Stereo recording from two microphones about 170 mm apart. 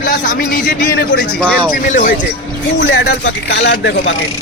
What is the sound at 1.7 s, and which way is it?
Speech, 50° left (ahead or behind).